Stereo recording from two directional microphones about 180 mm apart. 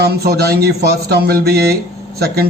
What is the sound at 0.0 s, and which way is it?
Speech, 60° right (ahead or behind).